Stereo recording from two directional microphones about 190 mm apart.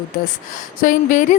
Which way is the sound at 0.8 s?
45° left (ahead or behind).